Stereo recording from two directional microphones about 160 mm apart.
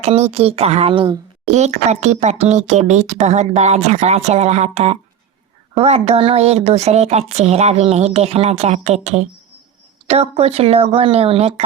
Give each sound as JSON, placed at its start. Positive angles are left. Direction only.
{"t": 0.0, "sound": "speech", "side_deg": -45}
{"t": 1.5, "sound": "speech", "side_deg": -45}